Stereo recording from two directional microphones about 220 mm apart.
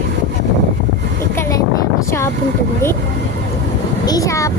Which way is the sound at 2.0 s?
15° left (ahead or behind).